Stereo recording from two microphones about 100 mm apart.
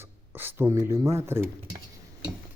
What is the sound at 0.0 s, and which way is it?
Speech, 20° right (ahead or behind).